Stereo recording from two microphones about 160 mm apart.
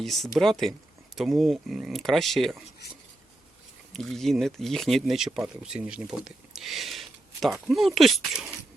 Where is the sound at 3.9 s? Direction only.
Centre (ahead or behind).